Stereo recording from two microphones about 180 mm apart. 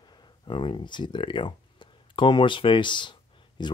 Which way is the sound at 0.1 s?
25° left (ahead or behind).